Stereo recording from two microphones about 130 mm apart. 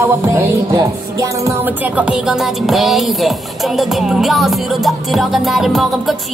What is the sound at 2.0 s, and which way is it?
Music, 5° right (ahead or behind).